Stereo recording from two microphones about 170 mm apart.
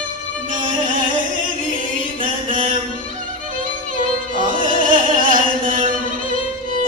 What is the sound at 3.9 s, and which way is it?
Music, 50° right (ahead or behind).